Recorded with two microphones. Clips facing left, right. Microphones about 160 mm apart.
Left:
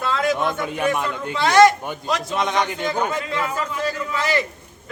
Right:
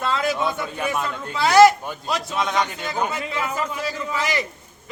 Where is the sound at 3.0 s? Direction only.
10° right (ahead or behind).